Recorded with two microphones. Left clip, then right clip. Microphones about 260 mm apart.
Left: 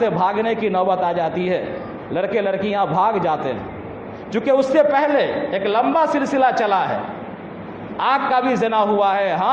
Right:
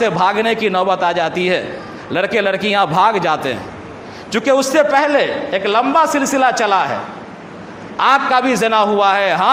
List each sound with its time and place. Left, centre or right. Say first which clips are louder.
0.0 s a man's voice: right 4 dB; right
7.9 s a man's voice: right 5 dB; right